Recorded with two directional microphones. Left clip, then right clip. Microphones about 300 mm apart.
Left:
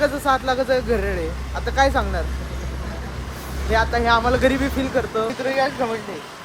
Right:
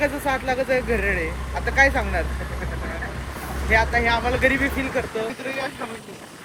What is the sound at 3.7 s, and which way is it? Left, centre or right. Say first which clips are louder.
Speech: left 1 dB; centre.